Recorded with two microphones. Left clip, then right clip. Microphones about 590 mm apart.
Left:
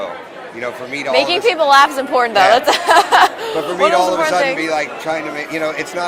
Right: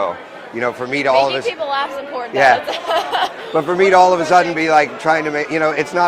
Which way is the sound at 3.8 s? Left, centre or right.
Right.